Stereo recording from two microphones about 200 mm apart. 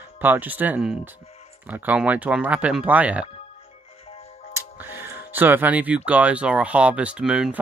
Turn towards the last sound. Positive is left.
turn(degrees=-5)  # may be behind; listen again after turning